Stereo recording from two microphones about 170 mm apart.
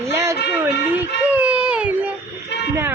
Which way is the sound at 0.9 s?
10° right (ahead or behind).